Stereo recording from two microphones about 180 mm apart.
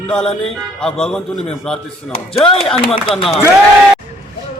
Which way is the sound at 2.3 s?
30° left (ahead or behind).